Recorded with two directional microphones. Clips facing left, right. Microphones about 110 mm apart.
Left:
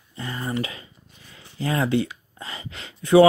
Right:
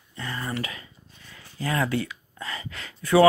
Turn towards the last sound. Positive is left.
turn(degrees=25)  # may be behind; listen again after turning